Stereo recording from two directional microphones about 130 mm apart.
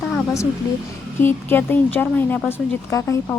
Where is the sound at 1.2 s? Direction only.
15° left (ahead or behind).